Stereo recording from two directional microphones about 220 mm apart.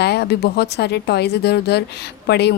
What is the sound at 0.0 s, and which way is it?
Speech, 50° left (ahead or behind).